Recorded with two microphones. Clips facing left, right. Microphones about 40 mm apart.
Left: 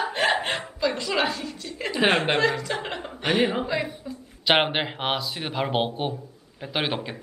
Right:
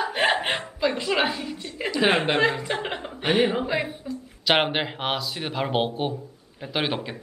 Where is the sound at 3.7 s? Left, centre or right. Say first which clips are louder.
Right 1 dB; centre.